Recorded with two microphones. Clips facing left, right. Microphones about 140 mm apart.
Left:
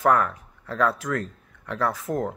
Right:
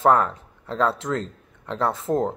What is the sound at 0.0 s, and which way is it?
Speech, 25° right (ahead or behind).